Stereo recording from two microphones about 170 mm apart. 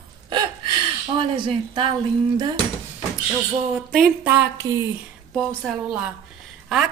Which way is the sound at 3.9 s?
5° right (ahead or behind).